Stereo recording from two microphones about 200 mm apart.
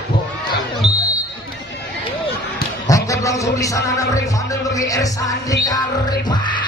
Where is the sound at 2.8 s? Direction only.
15° left (ahead or behind).